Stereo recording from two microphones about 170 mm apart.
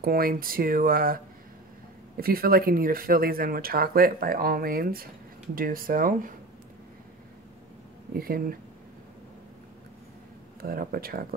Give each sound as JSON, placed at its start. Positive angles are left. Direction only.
{"t": 0.0, "sound": "speech", "side_deg": -60}
{"t": 8.2, "sound": "speech", "side_deg": -60}
{"t": 10.6, "sound": "speech", "side_deg": -60}